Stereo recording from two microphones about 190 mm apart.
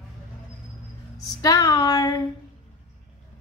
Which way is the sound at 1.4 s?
20° left (ahead or behind).